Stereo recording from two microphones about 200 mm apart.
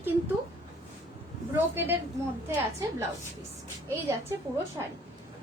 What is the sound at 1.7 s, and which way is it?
Speech, 10° right (ahead or behind).